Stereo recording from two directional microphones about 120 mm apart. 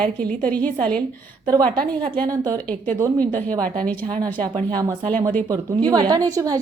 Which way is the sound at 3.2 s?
15° left (ahead or behind).